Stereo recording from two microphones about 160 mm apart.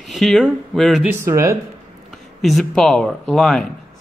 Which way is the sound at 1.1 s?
15° right (ahead or behind).